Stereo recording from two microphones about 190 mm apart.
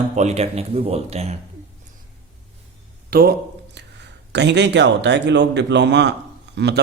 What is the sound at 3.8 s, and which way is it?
Speech, 65° right (ahead or behind).